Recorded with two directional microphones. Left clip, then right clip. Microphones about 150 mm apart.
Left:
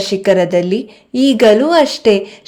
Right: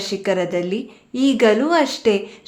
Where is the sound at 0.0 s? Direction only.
40° left (ahead or behind).